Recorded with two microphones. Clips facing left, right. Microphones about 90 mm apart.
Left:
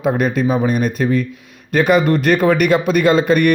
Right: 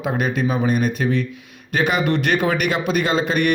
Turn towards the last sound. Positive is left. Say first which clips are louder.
# left 6 dB
turn(degrees=45)  # may be behind; listen again after turning